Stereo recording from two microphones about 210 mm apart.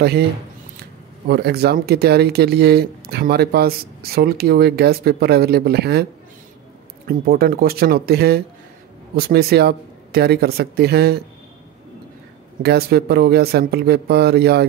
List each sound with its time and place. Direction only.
1.3 s speech: 50° right (ahead or behind)
7.1 s speech: 45° right (ahead or behind)
12.6 s speech: 50° right (ahead or behind)